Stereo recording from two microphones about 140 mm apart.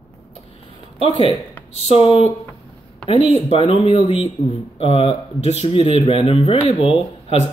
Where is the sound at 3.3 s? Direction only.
45° left (ahead or behind).